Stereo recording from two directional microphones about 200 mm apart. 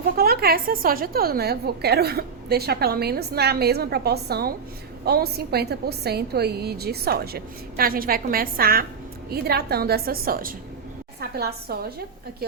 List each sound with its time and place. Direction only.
0.2 s a woman's voice: 50° right (ahead or behind)